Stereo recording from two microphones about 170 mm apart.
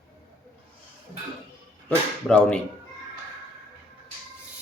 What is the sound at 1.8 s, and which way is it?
Speech, 5° left (ahead or behind).